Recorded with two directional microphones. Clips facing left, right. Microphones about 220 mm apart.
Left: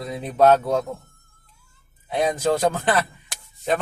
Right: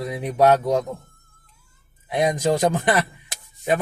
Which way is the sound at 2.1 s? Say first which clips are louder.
Right 1 dB; 15° right (ahead or behind).